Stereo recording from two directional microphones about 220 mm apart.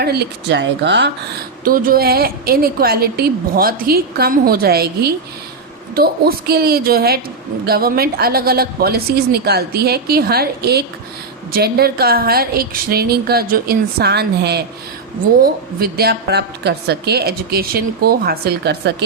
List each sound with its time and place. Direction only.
0.0 s a woman's voice: 45° right (ahead or behind)
1.6 s a woman's voice: 40° right (ahead or behind)